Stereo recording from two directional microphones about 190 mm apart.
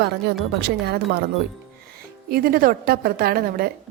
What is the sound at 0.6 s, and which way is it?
Speech, 55° right (ahead or behind).